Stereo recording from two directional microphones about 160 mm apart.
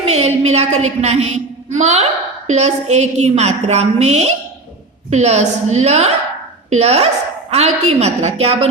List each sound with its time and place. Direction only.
0.0 s a woman's voice: 40° right (ahead or behind)